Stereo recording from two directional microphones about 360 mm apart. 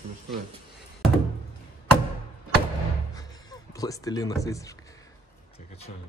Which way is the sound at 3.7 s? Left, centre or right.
Centre.